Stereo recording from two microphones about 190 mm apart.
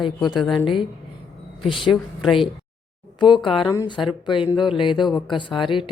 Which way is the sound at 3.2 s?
25° left (ahead or behind).